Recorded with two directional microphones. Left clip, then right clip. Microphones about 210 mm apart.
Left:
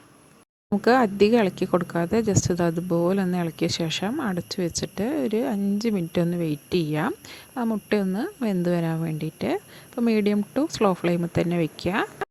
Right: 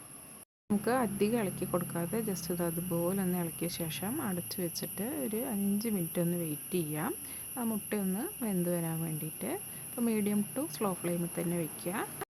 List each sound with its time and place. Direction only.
0.8 s speech: 35° left (ahead or behind)